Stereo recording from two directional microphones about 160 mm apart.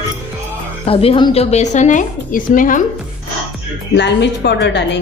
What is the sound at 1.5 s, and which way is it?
Speech, 45° left (ahead or behind).